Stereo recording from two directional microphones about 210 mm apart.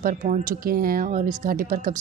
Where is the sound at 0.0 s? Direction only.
40° right (ahead or behind).